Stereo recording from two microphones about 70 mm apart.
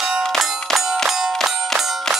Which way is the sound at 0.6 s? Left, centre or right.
Centre.